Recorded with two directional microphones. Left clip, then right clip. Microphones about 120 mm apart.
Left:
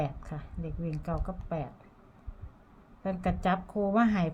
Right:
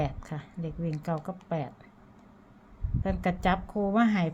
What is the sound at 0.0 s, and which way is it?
A woman's voice, 25° right (ahead or behind).